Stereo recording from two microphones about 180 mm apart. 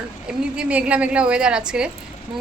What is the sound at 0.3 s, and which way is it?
A woman's voice, 5° right (ahead or behind).